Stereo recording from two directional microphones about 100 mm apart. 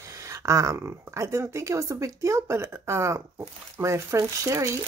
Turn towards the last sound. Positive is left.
turn(degrees=-30)  # may be behind; listen again after turning